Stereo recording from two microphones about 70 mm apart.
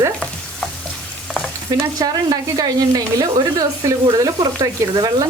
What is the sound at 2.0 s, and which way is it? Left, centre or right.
Speech, right.